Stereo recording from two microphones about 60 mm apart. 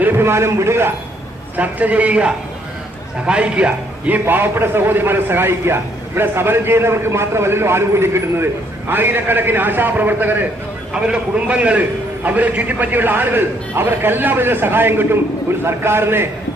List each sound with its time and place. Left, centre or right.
0.0 s a man's voice: right
1.5 s a man's voice: right
4.3 s a man's voice: right
11.0 s a man's voice: centre; by 16.3 s right